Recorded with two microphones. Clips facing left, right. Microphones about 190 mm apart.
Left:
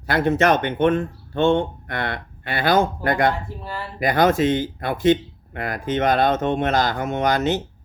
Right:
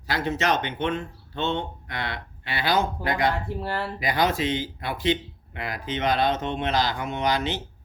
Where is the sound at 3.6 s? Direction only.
65° right (ahead or behind).